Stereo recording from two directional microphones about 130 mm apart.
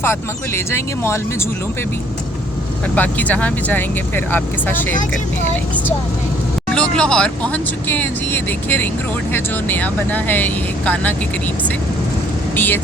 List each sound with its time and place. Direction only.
0.0 s speech: 20° left (ahead or behind)
2.9 s speech: 10° left (ahead or behind)
6.7 s speech: 5° left (ahead or behind)
12.5 s speech: 15° left (ahead or behind)